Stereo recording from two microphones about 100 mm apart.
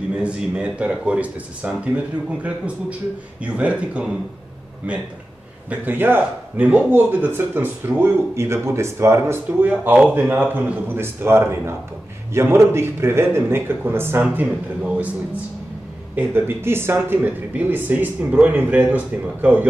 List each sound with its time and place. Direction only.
0.2 s speech: 10° right (ahead or behind)
5.7 s speech: 20° right (ahead or behind)
16.2 s speech: 20° right (ahead or behind)